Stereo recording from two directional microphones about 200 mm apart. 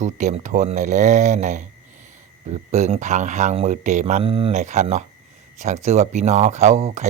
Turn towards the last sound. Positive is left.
turn(degrees=-35)  # may be behind; listen again after turning